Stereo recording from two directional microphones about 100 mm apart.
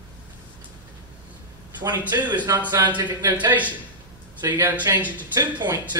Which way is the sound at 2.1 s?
30° right (ahead or behind).